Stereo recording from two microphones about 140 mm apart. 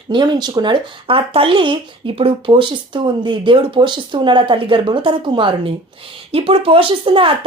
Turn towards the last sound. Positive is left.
turn(degrees=-40)  # may be behind; listen again after turning